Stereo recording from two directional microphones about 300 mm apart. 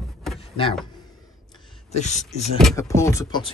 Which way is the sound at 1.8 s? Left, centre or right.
Left.